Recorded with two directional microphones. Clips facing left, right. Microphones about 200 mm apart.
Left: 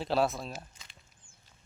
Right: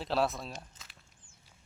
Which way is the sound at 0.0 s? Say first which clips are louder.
Left 2 dB; centre (ahead or behind).